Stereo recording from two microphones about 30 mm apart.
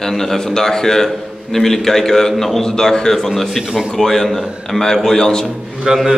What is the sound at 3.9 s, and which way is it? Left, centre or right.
A man's voice, centre.